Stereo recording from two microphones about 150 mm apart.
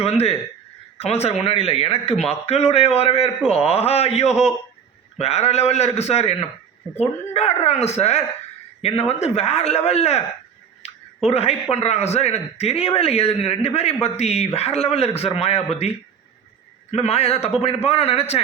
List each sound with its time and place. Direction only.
0.0 s a man's voice: 45° left (ahead or behind)
16.9 s a man's voice: 45° left (ahead or behind)